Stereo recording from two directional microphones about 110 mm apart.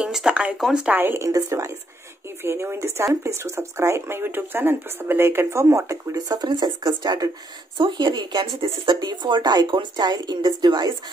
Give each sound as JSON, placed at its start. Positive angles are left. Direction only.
{"t": 0.0, "sound": "speech", "side_deg": -5}